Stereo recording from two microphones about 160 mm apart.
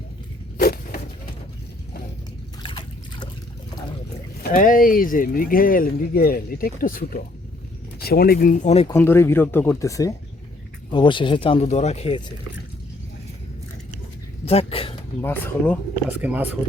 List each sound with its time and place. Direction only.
0.5 s a sound: 70° left (ahead or behind)
2.6 s trickle: 30° left (ahead or behind)
4.4 s speech: 60° left (ahead or behind)
7.9 s speech: 70° left (ahead or behind)
8.9 s speech: 15° left (ahead or behind); by 12.2 s 40° left (ahead or behind)
14.4 s speech: 40° left (ahead or behind)
15.2 s speech: 15° left (ahead or behind)
16.0 s speech: 10° right (ahead or behind)